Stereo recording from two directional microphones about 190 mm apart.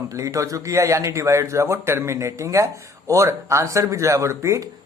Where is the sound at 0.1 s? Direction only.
15° right (ahead or behind).